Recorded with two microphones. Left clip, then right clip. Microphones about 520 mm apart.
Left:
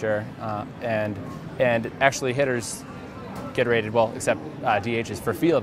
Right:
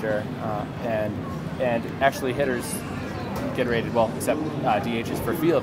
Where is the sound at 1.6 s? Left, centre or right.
Left.